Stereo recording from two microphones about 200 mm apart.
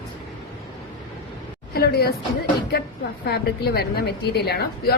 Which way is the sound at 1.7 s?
50° left (ahead or behind).